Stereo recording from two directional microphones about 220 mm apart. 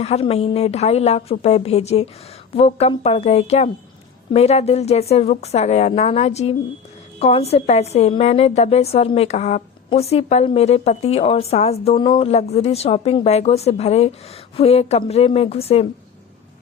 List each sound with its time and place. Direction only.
0.0 s a woman's voice: 25° left (ahead or behind)